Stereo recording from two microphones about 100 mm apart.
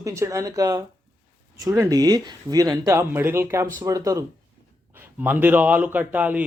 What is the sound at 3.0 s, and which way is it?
Speech, 25° right (ahead or behind).